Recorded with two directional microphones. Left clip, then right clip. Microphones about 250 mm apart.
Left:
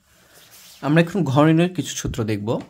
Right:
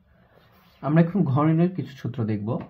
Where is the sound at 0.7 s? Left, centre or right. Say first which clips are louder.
Left 4 dB; left.